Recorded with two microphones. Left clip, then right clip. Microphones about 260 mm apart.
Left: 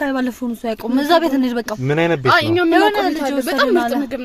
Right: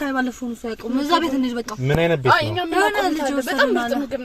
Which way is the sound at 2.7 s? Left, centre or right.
Left.